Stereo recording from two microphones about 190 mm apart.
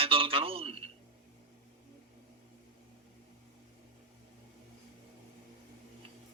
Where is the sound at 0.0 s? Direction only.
30° right (ahead or behind).